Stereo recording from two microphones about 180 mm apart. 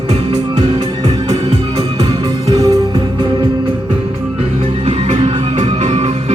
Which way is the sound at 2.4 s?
20° right (ahead or behind).